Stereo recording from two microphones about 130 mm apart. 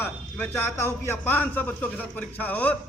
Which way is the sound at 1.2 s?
15° left (ahead or behind).